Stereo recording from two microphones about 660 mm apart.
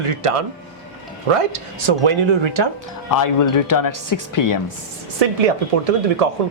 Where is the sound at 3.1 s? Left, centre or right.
Left.